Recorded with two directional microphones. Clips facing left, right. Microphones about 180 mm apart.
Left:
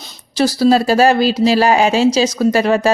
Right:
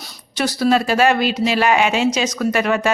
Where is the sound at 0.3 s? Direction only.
30° left (ahead or behind).